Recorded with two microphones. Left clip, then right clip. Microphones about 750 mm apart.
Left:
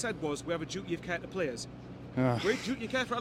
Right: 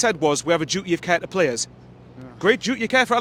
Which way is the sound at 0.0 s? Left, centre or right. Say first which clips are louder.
Right 15 dB; right.